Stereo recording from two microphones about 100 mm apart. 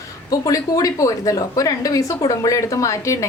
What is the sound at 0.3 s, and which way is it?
A woman's voice, 35° left (ahead or behind).